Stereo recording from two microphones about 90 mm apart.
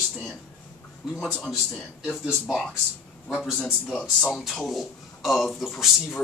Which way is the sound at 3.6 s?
10° left (ahead or behind).